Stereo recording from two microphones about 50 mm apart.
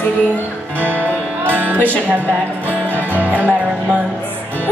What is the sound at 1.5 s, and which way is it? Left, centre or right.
Music, right.